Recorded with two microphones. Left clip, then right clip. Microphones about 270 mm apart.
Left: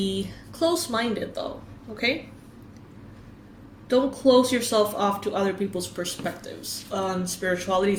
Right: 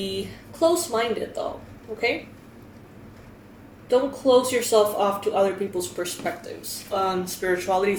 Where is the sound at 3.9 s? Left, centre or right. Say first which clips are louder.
Right 1 dB; left.